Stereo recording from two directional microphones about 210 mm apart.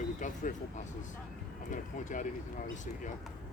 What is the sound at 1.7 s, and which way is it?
Speech, 40° left (ahead or behind).